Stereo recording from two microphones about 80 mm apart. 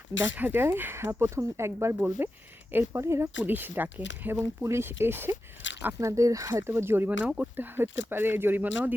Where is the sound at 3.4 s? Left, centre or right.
Right.